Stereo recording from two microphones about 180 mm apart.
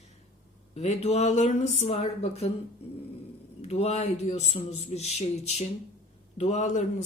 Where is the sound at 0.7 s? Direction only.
40° left (ahead or behind).